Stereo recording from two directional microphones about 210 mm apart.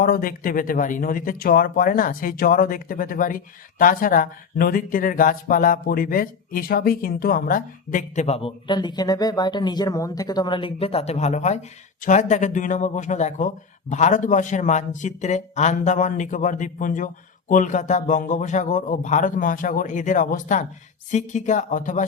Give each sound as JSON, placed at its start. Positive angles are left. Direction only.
{"t": 0.0, "sound": "speech", "side_deg": 45}